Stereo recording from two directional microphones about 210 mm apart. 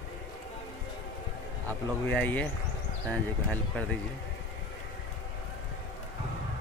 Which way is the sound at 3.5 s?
5° left (ahead or behind).